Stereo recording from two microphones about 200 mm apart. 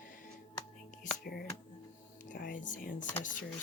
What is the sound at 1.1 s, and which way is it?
Speech, 50° left (ahead or behind).